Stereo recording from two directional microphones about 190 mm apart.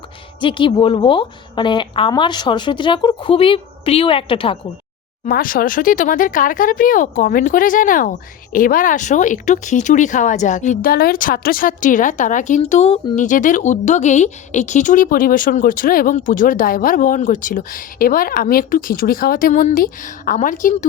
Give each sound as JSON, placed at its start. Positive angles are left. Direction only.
{"t": 0.3, "sound": "a woman's voice", "side_deg": 25}
{"t": 5.2, "sound": "speech", "side_deg": 45}
{"t": 13.2, "sound": "speech", "side_deg": 40}